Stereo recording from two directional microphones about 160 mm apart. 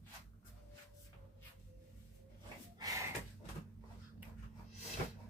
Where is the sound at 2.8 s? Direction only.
20° right (ahead or behind).